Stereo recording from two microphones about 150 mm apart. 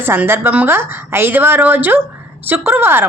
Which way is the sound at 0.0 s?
15° right (ahead or behind).